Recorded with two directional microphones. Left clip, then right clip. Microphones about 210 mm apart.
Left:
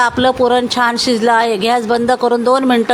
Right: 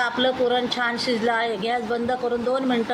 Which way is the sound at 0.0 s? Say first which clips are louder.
Left 9 dB; 50° left (ahead or behind).